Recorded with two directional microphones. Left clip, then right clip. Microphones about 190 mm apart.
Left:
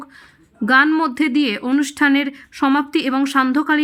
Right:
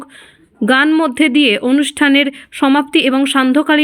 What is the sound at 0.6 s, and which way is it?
Speech, 20° right (ahead or behind).